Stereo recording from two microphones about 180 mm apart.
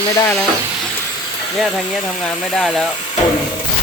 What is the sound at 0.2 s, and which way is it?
Speech, 15° left (ahead or behind).